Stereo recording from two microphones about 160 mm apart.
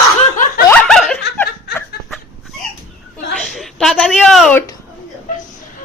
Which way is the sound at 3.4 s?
Centre (ahead or behind).